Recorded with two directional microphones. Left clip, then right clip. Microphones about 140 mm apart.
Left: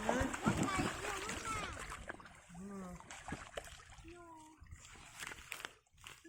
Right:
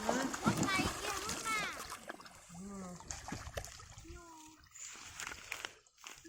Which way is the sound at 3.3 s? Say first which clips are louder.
Even; 25° right (ahead or behind).